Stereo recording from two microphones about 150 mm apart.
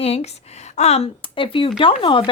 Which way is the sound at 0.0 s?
45° left (ahead or behind).